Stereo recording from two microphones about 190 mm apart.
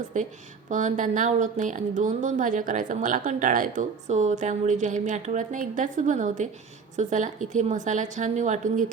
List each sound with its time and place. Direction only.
0.1 s a woman's voice: 40° right (ahead or behind)